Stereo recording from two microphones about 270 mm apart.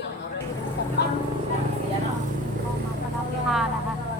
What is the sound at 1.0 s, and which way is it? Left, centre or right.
Speech, left.